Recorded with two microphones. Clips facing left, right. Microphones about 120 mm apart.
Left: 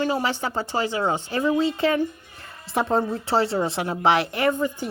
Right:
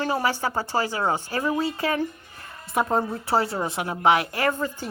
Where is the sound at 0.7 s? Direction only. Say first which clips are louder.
Left 2 dB; 25° left (ahead or behind).